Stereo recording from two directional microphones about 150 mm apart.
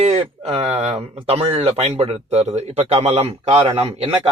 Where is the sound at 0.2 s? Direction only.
35° right (ahead or behind).